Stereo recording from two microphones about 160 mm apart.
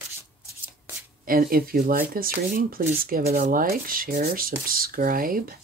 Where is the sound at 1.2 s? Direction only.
65° right (ahead or behind).